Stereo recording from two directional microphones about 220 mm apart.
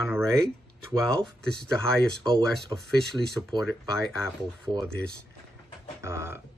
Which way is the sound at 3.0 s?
Centre (ahead or behind).